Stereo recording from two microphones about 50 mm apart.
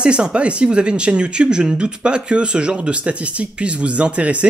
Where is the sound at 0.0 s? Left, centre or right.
Centre.